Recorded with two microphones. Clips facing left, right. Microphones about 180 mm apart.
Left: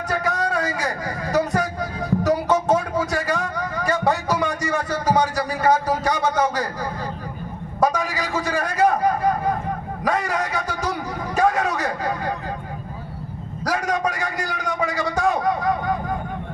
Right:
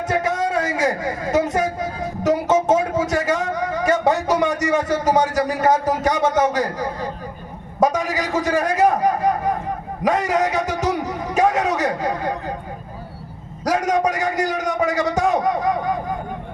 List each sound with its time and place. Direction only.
0.1 s vehicle: 25° right (ahead or behind)
7.8 s a sound: 20° right (ahead or behind)
13.7 s a man's voice: 20° right (ahead or behind)